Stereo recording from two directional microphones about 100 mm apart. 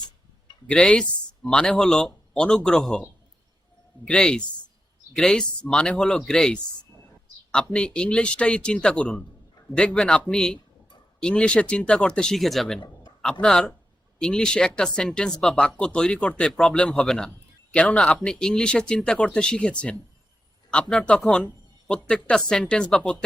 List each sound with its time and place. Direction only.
0.7 s a man's voice: 10° left (ahead or behind)
4.0 s a man's voice: 10° left (ahead or behind)